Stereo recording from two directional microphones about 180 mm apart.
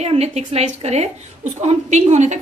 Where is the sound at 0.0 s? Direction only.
35° right (ahead or behind).